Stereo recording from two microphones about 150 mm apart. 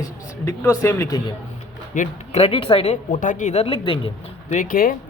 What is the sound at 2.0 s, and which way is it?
Speech, 45° left (ahead or behind).